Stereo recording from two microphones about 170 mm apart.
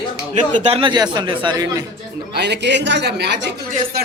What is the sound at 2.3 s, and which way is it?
A woman's voice, 80° right.